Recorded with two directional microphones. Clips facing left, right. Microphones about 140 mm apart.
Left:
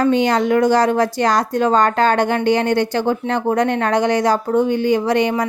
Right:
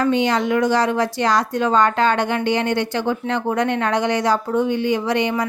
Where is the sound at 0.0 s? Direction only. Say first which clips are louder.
Left 3 dB; 40° left (ahead or behind).